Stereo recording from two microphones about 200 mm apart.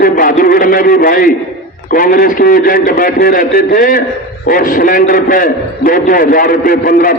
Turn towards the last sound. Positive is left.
turn(degrees=45)  # may be behind; listen again after turning